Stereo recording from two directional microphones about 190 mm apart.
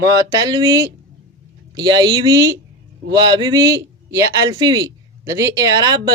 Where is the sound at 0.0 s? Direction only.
20° right (ahead or behind).